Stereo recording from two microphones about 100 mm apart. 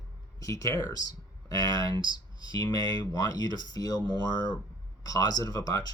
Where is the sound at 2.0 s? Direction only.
55° right (ahead or behind).